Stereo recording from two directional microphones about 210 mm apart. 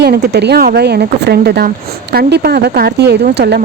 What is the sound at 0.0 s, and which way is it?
Speech, 50° right (ahead or behind).